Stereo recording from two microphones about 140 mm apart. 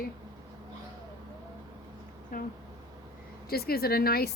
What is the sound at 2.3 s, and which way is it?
Speech, 90° left.